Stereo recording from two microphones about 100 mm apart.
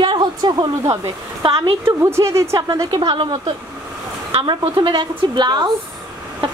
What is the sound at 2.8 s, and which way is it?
Speech, 55° right (ahead or behind).